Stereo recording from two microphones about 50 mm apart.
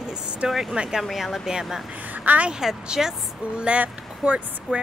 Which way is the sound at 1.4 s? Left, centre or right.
Centre.